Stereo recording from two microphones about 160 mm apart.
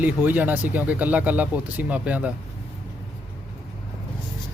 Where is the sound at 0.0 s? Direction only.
10° right (ahead or behind).